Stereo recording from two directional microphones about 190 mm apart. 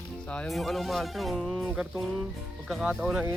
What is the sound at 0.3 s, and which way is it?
Speech, 5° left (ahead or behind).